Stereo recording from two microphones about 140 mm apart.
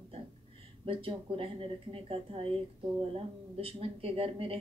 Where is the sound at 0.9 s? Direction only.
40° right (ahead or behind).